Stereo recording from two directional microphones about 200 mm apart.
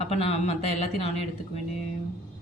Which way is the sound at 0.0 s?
30° left (ahead or behind).